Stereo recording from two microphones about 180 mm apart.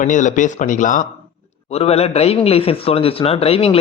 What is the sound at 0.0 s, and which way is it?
Speech, 45° left (ahead or behind).